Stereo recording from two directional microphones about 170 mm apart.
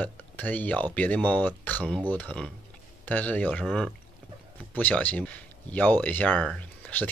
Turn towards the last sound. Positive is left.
turn(degrees=10)  # may be behind; listen again after turning